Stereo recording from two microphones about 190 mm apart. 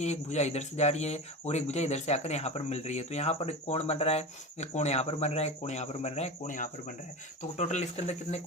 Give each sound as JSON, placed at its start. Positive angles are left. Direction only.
{"t": 0.0, "sound": "speech", "side_deg": 35}